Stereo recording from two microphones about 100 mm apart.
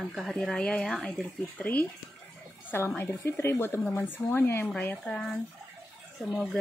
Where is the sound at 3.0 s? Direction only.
25° left (ahead or behind).